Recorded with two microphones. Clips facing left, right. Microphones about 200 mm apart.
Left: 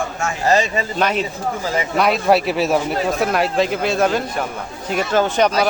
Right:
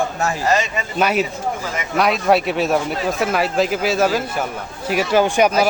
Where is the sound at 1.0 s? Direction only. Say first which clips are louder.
Right 3 dB; 5° right (ahead or behind).